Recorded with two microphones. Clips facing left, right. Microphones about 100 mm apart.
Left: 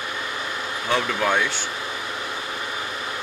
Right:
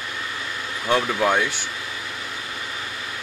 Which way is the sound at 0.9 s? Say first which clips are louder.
Right 2 dB; 10° right (ahead or behind).